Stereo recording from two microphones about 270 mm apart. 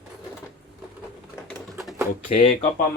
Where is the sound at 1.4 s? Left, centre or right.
Centre.